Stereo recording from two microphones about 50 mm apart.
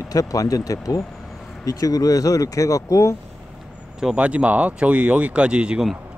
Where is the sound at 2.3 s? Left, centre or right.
Left.